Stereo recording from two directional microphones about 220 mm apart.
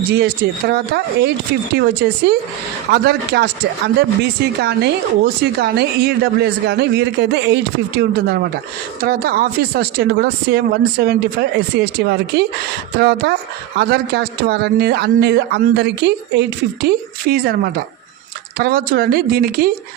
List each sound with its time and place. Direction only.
0.1 s a man's voice: 50° right (ahead or behind)
4.6 s a man's voice: 45° right (ahead or behind)